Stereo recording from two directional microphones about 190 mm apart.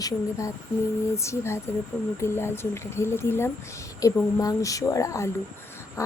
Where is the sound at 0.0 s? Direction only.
15° left (ahead or behind).